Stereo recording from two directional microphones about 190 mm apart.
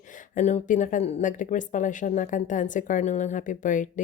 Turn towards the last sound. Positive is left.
turn(degrees=40)  # may be behind; listen again after turning